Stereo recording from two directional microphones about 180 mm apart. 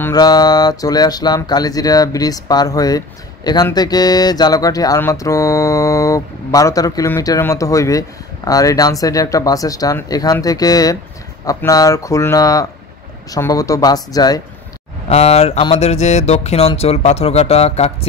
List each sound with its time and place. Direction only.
0.0 s speech: 20° left (ahead or behind)
15.0 s mantra: 35° left (ahead or behind)